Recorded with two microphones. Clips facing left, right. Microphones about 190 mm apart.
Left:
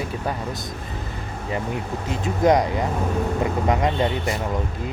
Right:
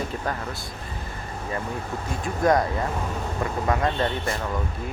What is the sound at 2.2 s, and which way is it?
Speech, 20° left (ahead or behind).